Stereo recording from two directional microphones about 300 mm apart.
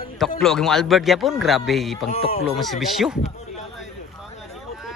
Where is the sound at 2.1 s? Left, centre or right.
Left.